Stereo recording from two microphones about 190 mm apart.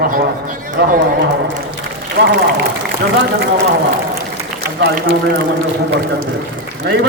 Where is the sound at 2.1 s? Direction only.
60° right (ahead or behind).